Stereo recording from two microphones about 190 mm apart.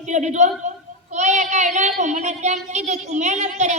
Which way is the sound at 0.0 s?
40° right (ahead or behind).